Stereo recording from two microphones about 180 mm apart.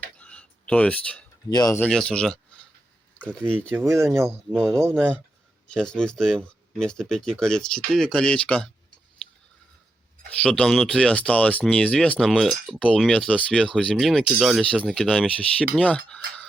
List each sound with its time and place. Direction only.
0.2 s a sound: 5° left (ahead or behind)
1.5 s speech: 20° left (ahead or behind)
1.8 s speech: 5° left (ahead or behind)
3.7 s speech: 15° right (ahead or behind)
4.6 s speech: 5° left (ahead or behind)
10.2 s speech: 5° left (ahead or behind)